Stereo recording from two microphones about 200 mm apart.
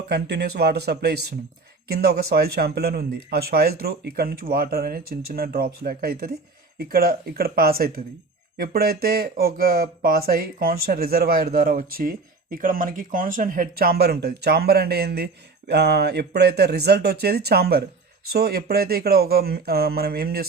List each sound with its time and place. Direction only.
0.1 s speech: 55° right (ahead or behind)